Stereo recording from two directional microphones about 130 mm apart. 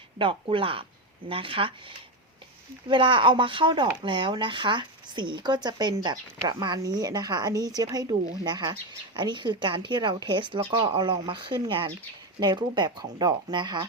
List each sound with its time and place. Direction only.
0.2 s speech: 40° right (ahead or behind)